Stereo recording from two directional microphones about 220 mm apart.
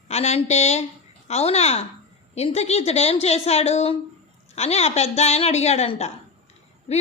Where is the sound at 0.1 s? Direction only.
30° left (ahead or behind).